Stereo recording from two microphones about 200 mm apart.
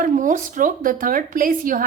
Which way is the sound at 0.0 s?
40° right (ahead or behind).